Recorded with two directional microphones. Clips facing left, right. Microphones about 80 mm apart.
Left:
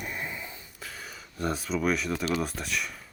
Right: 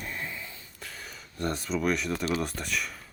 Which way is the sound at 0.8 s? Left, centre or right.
Centre.